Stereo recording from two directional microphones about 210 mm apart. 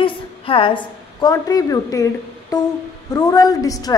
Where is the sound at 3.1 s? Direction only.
20° left (ahead or behind).